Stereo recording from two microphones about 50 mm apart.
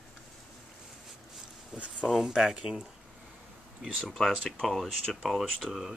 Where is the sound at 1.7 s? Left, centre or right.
Centre.